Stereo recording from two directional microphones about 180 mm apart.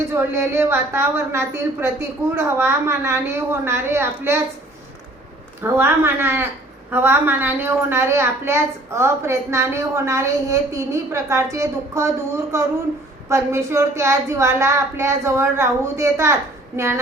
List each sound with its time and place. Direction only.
0.1 s a woman's voice: 15° right (ahead or behind)
5.6 s a woman's voice: 15° right (ahead or behind)